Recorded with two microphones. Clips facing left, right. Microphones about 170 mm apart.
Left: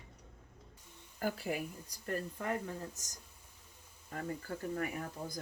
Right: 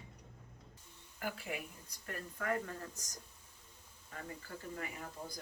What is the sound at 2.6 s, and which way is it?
Speech, 15° left (ahead or behind).